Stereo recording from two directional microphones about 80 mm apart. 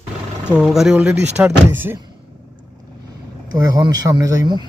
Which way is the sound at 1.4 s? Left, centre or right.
Right.